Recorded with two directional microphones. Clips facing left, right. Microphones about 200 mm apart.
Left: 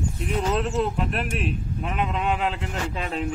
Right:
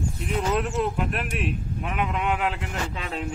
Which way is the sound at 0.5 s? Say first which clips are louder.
Even; 30° left (ahead or behind).